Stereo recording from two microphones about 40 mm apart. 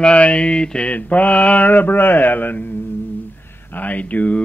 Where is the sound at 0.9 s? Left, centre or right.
Left.